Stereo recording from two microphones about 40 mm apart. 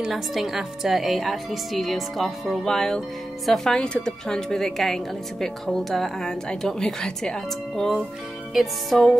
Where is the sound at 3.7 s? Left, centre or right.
Left.